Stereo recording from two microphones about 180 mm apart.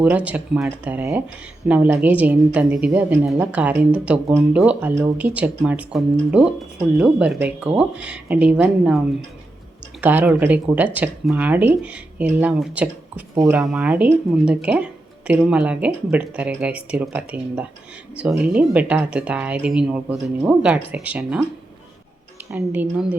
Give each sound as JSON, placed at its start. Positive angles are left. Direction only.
{"t": 0.0, "sound": "a woman's voice", "side_deg": -10}
{"t": 13.3, "sound": "a woman's voice", "side_deg": -20}
{"t": 13.6, "sound": "a woman's voice", "side_deg": -5}
{"t": 22.5, "sound": "a woman's voice", "side_deg": -10}